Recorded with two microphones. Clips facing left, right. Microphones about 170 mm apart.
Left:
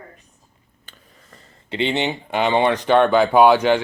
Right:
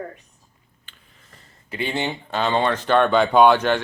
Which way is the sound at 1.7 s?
20° left (ahead or behind).